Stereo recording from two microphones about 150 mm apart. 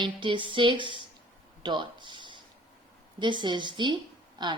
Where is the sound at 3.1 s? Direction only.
30° right (ahead or behind).